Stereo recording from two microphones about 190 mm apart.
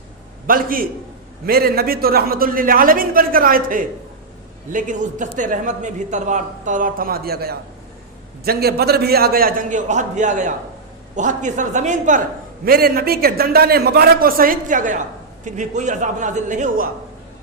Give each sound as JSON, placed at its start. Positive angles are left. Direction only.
{"t": 0.4, "sound": "a man's voice", "side_deg": -50}
{"t": 12.6, "sound": "a man's voice", "side_deg": -50}